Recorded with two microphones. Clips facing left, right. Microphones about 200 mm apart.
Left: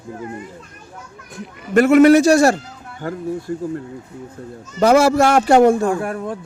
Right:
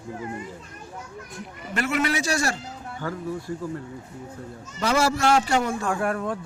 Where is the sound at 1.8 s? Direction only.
50° left (ahead or behind).